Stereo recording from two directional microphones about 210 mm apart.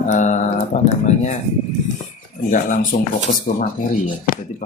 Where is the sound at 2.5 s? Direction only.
40° left (ahead or behind).